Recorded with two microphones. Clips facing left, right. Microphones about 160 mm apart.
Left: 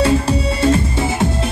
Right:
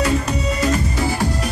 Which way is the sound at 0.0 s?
30° left (ahead or behind).